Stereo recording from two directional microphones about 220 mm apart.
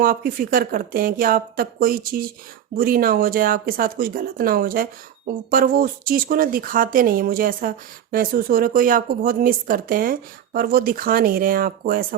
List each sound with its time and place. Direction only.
0.0 s speech: 40° right (ahead or behind)